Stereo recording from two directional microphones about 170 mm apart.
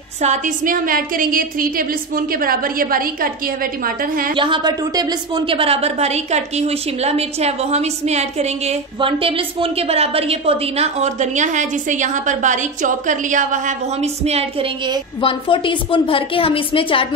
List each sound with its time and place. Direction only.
0.2 s a woman's voice: 50° right (ahead or behind)
4.4 s a woman's voice: 25° right (ahead or behind)
15.2 s a woman's voice: 30° left (ahead or behind)